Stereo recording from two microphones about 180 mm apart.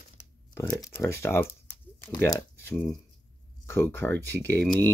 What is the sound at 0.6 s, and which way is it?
Speech, 15° left (ahead or behind).